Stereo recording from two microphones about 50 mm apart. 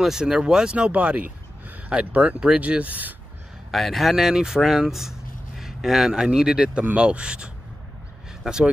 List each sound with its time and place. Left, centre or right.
0.2 s speech: centre
3.7 s speech: centre
4.1 s speech: centre